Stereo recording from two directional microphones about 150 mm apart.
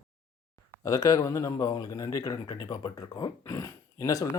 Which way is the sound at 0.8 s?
20° left (ahead or behind).